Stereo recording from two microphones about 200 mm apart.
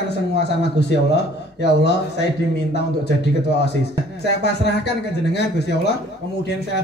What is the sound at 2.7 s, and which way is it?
A man's voice, 55° left (ahead or behind).